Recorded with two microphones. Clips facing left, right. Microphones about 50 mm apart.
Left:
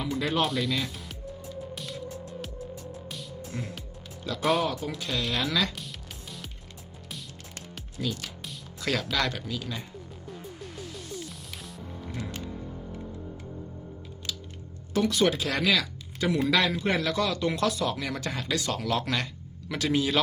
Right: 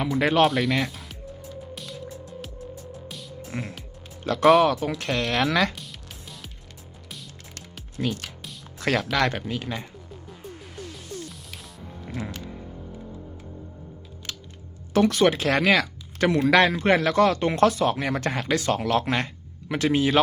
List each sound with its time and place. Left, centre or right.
0.2 s speech: right
0.4 s speech: right
0.9 s music: centre
3.5 s music: right
4.2 s speech: right
5.7 s music: centre
7.9 s speech: right
11.3 s music: centre
14.3 s a sound: right
14.9 s speech: right